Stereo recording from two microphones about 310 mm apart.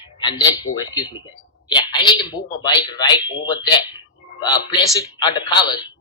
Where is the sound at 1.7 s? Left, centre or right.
Centre.